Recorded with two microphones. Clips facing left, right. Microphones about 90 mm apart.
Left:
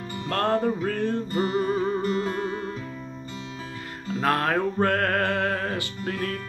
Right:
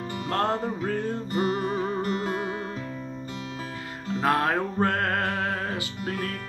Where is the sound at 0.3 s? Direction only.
15° right (ahead or behind).